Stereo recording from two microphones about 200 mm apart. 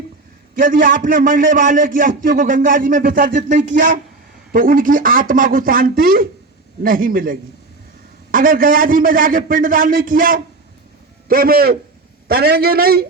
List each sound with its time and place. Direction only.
0.5 s a man's voice: 40° right (ahead or behind)